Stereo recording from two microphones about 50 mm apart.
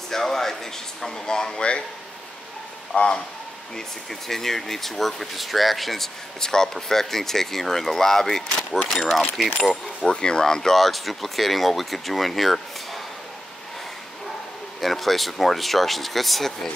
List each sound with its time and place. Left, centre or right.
0.1 s speech: centre
2.9 s speech: left
3.7 s speech: centre
10.0 s speech: centre
14.8 s speech: centre